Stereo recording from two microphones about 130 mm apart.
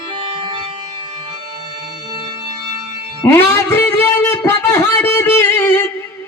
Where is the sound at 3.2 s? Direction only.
20° left (ahead or behind).